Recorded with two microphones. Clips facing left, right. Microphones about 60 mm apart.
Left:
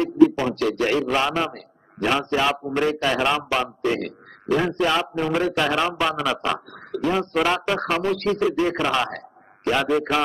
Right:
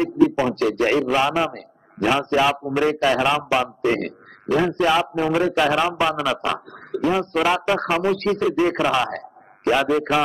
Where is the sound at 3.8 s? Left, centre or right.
Right.